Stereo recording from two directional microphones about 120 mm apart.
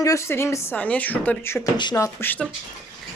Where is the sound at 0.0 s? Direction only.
25° left (ahead or behind).